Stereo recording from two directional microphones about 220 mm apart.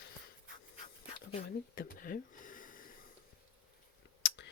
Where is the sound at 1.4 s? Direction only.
40° left (ahead or behind).